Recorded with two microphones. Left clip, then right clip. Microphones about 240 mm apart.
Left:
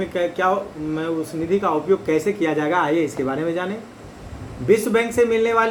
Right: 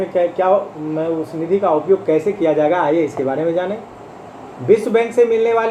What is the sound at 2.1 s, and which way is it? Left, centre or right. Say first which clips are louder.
Speech: right 5 dB; left.